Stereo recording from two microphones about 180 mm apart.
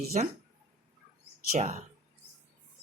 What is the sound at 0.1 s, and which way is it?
Speech, 45° right (ahead or behind).